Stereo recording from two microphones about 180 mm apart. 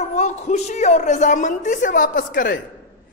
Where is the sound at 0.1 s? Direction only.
40° left (ahead or behind).